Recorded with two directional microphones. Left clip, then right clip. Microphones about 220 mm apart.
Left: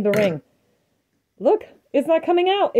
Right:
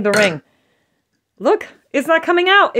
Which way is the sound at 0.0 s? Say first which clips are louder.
Right 5 dB; 45° right (ahead or behind).